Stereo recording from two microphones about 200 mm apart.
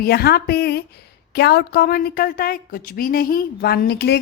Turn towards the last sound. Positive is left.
turn(degrees=50)  # may be behind; listen again after turning